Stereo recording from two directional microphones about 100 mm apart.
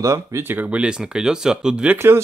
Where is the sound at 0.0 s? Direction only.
30° right (ahead or behind); by 2.0 s 10° right (ahead or behind).